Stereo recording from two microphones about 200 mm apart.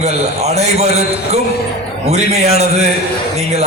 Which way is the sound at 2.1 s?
30° right (ahead or behind).